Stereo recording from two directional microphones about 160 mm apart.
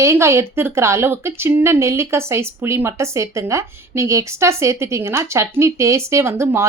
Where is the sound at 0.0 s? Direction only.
15° right (ahead or behind).